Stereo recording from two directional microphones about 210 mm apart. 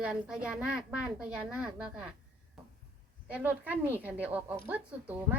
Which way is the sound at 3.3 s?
5° right (ahead or behind).